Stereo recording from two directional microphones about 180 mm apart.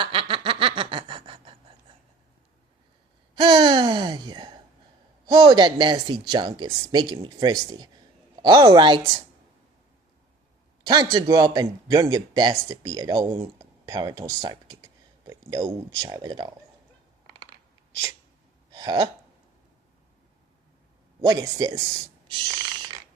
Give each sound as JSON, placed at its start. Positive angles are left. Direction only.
{"t": 0.0, "sound": "snicker", "side_deg": -30}
{"t": 3.3, "sound": "a sound", "side_deg": -25}
{"t": 5.2, "sound": "speech", "side_deg": -20}
{"t": 10.8, "sound": "speech", "side_deg": -20}
{"t": 18.7, "sound": "hiccup", "side_deg": -20}
{"t": 21.2, "sound": "speech", "side_deg": -20}